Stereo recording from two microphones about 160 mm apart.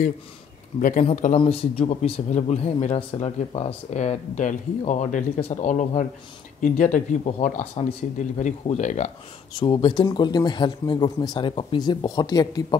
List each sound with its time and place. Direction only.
0.7 s speech: 55° left (ahead or behind)
1.4 s speech: 40° left (ahead or behind)
9.6 s speech: 30° left (ahead or behind)